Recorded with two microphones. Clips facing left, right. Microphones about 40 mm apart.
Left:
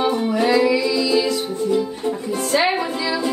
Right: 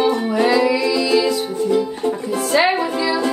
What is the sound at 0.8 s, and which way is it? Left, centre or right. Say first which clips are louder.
Music: right 2 dB; right.